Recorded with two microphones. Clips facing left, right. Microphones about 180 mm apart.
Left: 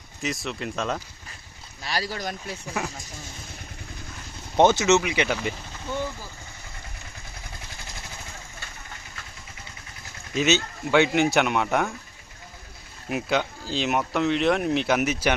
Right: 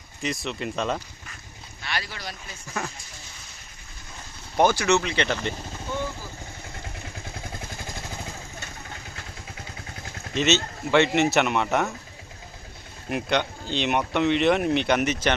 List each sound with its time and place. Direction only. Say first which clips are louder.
0.2 s speech: right 1 dB; centre (ahead or behind)
1.8 s speech: left 4 dB; 35° left (ahead or behind)
4.5 s speech: left 2 dB; 20° left (ahead or behind)
10.3 s speech: even; centre (ahead or behind)
13.1 s speech: even; centre (ahead or behind)